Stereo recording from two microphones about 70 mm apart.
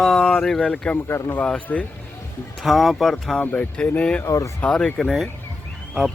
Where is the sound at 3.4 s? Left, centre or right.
Centre.